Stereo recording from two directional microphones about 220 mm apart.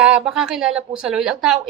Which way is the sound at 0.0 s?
5° right (ahead or behind).